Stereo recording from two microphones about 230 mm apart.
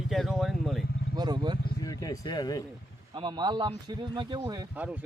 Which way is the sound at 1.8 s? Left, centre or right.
Centre.